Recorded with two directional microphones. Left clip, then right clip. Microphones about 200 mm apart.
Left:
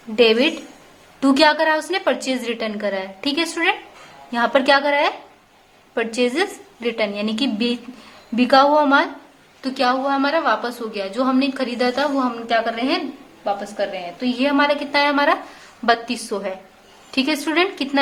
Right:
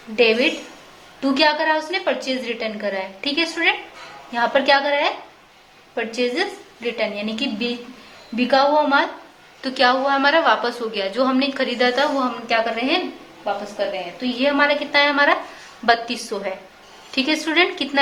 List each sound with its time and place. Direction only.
0.2 s a woman's voice: 25° left (ahead or behind)